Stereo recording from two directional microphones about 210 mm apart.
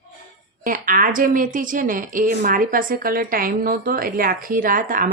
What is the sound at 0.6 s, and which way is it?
Speech, 40° right (ahead or behind).